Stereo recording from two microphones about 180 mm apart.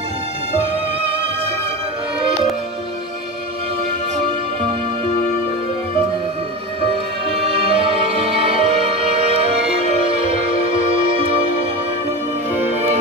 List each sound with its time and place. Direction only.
6.9 s music: 35° right (ahead or behind)